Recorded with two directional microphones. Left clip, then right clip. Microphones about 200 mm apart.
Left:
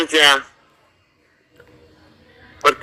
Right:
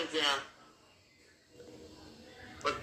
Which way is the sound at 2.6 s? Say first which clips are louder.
Left 19 dB; 55° left (ahead or behind).